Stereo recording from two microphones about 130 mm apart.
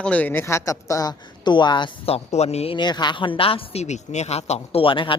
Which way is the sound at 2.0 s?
55° left (ahead or behind).